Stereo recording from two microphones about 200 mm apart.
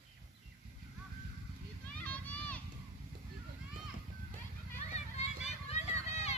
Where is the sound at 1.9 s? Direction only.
5° left (ahead or behind).